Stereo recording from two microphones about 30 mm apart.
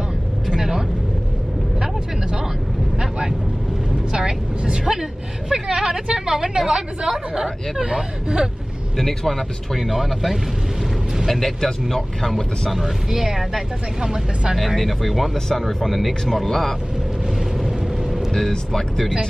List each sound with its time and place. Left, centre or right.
0.5 s vehicle: centre
3.0 s vehicle: centre
4.1 s a woman's voice: right
8.9 s speech: centre
9.8 s speech: centre
11.2 s speech: centre
12.7 s speech: centre
14.8 s speech: centre
15.3 s speech: centre
15.6 s speech: centre
17.6 s vehicle: centre
18.7 s speech: centre